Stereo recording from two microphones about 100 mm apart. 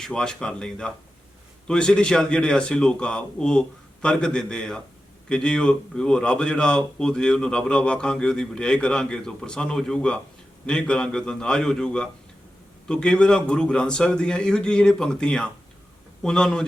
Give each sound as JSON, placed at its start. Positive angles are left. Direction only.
{"t": 0.0, "sound": "speech", "side_deg": 5}